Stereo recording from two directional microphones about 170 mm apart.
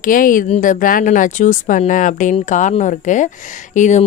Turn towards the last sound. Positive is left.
turn(degrees=45)  # may be behind; listen again after turning